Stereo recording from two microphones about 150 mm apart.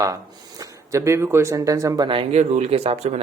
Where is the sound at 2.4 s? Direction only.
50° right (ahead or behind).